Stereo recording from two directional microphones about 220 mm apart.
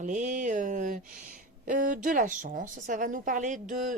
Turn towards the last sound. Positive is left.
turn(degrees=-35)  # may be behind; listen again after turning